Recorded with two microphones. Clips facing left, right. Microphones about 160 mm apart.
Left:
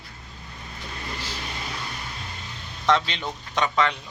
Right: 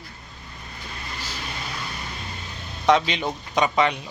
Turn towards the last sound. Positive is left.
turn(degrees=-15)  # may be behind; listen again after turning